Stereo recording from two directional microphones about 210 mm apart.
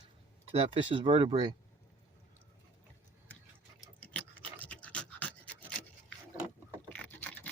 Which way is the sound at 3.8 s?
10° left (ahead or behind).